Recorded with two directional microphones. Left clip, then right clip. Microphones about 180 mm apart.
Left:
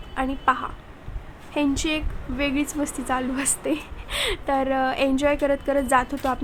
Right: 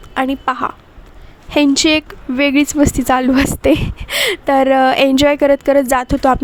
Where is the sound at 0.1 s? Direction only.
50° right (ahead or behind).